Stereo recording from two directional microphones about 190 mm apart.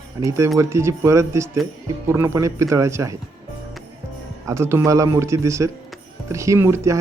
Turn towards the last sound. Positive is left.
turn(degrees=-15)  # may be behind; listen again after turning